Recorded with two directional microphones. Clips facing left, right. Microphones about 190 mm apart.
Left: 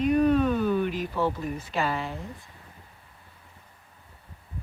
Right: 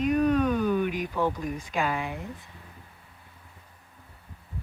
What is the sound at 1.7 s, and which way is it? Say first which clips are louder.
Speech: even; 10° right (ahead or behind).